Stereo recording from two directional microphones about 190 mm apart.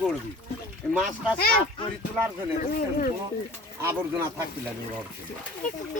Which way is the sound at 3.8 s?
15° right (ahead or behind).